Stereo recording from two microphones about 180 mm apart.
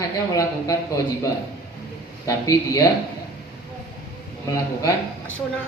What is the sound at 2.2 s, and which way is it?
Speech, 20° left (ahead or behind).